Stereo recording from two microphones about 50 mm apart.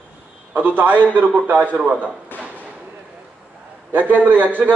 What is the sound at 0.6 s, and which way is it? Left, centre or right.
A man's voice, right.